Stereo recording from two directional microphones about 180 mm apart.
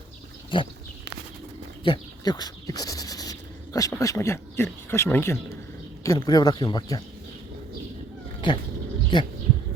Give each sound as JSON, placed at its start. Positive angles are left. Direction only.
{"t": 0.5, "sound": "speech", "side_deg": 30}
{"t": 1.8, "sound": "speech", "side_deg": 25}
{"t": 9.1, "sound": "speech", "side_deg": 30}